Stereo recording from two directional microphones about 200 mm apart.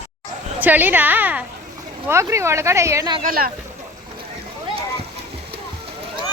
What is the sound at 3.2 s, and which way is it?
Speech, 45° right (ahead or behind).